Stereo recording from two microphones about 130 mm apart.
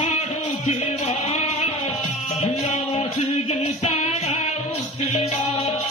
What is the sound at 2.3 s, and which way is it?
Music, 50° left (ahead or behind).